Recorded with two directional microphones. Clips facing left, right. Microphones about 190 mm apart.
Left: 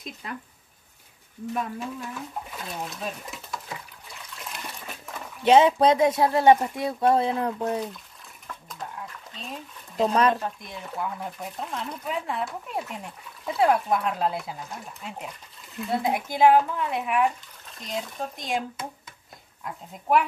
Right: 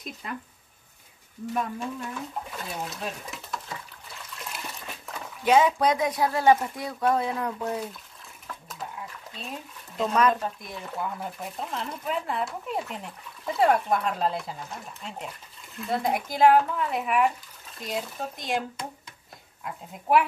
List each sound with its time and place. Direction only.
1.5 s speech: centre (ahead or behind)
4.4 s dog: centre (ahead or behind)
5.4 s speech: 25° left (ahead or behind)
8.5 s a sound: 5° right (ahead or behind)
10.1 s speech: 30° left (ahead or behind)
10.4 s speech: centre (ahead or behind)